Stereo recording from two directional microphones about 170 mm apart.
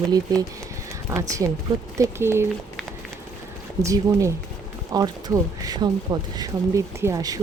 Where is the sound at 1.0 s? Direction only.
15° right (ahead or behind).